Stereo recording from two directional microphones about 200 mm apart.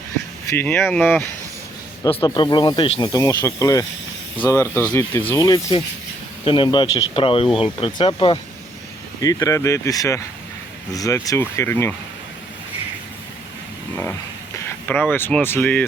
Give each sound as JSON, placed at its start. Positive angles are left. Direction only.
{"t": 0.5, "sound": "speech", "side_deg": 10}
{"t": 2.0, "sound": "speech", "side_deg": 25}
{"t": 13.9, "sound": "speech", "side_deg": 10}